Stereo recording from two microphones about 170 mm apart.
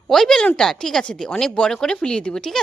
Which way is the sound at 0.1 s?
5° left (ahead or behind).